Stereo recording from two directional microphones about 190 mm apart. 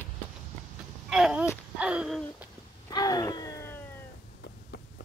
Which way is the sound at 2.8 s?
20° left (ahead or behind).